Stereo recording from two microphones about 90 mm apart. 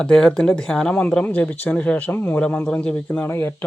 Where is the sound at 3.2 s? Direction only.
25° left (ahead or behind).